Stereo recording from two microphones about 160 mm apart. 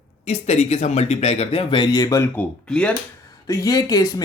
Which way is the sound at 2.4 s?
5° left (ahead or behind).